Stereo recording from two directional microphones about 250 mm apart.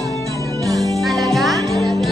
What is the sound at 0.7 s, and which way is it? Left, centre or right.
Music, centre.